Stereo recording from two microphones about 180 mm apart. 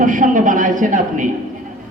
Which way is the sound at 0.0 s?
45° right (ahead or behind).